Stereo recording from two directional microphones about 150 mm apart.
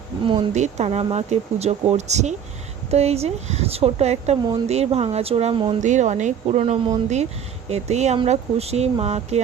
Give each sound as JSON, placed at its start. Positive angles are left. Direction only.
{"t": 0.5, "sound": "speech", "side_deg": -50}
{"t": 5.8, "sound": "speech", "side_deg": -55}